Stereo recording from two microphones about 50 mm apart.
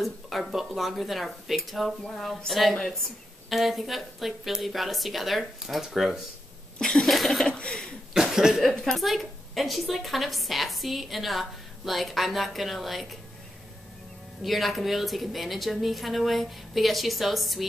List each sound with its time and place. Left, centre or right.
0.0 s a woman's voice: centre
3.4 s a woman's voice: centre
6.8 s a woman's voice: centre
7.4 s a sound: centre
8.1 s cough: centre
8.6 s a woman's voice: centre
14.4 s a woman's voice: centre